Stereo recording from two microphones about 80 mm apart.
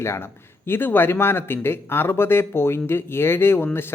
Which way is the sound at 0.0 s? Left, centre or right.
Left.